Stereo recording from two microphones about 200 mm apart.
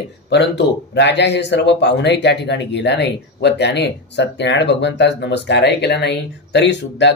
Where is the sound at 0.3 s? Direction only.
55° left (ahead or behind).